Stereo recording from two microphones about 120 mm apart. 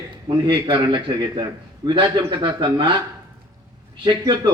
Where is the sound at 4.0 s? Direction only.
40° right (ahead or behind).